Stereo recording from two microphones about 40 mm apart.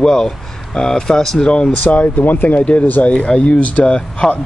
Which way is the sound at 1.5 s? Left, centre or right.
Left.